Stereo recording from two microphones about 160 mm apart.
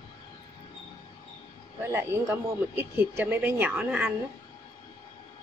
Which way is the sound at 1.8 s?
15° right (ahead or behind).